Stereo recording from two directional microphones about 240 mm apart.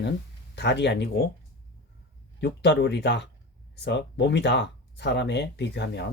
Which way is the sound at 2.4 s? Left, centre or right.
Left.